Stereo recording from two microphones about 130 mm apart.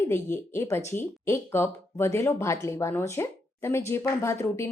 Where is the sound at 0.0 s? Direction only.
20° left (ahead or behind).